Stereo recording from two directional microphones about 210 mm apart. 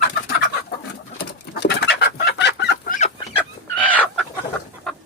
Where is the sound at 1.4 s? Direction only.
50° left (ahead or behind).